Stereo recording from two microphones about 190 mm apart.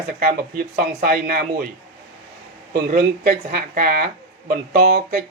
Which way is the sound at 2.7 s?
50° right (ahead or behind).